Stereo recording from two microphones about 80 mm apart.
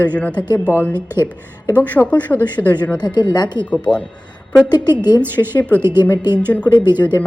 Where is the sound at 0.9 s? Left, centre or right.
Right.